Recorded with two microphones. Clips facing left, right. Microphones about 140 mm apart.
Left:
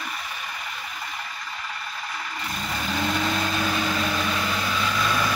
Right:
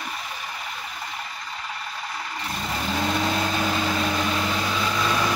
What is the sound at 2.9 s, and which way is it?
Vehicle, 20° right (ahead or behind).